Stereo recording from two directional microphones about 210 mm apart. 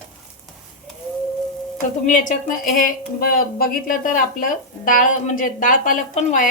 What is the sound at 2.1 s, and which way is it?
A woman's voice, 40° left (ahead or behind).